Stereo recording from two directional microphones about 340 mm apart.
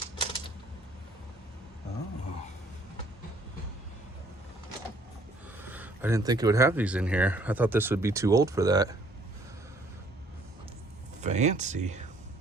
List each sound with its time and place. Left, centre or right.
0.2 s typewriter: centre
5.5 s speech: centre
11.2 s speech: centre